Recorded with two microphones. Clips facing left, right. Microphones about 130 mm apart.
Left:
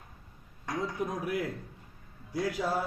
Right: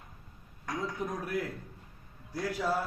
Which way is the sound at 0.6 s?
15° left (ahead or behind).